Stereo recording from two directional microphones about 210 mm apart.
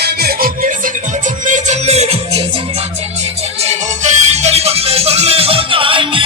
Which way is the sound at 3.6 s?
30° right (ahead or behind).